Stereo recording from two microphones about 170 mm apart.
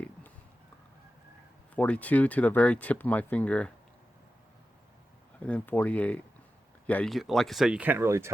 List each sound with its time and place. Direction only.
1.7 s speech: 10° left (ahead or behind)
5.4 s speech: 10° left (ahead or behind); by 8.3 s 15° right (ahead or behind)